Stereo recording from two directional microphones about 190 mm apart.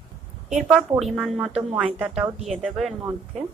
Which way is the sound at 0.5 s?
Centre (ahead or behind).